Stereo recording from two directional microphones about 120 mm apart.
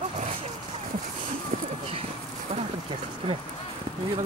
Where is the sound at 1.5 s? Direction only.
90° right.